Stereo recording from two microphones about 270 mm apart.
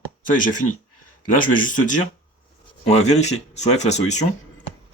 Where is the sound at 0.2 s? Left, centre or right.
Left.